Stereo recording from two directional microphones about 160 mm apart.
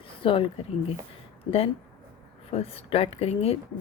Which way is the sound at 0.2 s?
35° left (ahead or behind).